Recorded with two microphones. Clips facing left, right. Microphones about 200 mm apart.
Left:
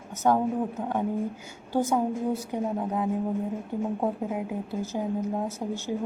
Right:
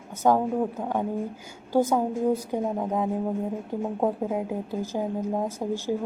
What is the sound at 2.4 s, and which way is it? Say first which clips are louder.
Speech: right 2 dB; 10° right (ahead or behind).